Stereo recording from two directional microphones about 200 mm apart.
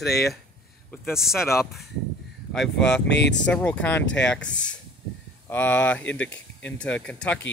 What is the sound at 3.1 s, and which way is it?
Speech, 60° left (ahead or behind).